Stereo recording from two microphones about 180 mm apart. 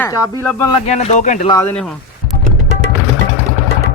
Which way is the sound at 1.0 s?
40° left (ahead or behind).